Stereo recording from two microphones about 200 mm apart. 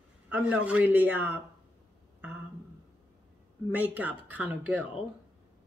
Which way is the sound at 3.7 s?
10° right (ahead or behind).